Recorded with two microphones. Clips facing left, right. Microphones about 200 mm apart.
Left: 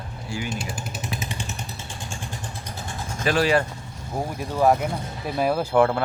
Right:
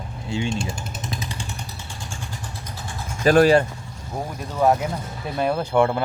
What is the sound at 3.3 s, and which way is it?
Speech, 40° right (ahead or behind).